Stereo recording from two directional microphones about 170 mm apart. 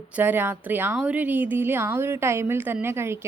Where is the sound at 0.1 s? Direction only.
10° right (ahead or behind).